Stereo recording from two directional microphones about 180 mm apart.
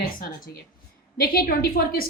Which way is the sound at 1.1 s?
55° left (ahead or behind).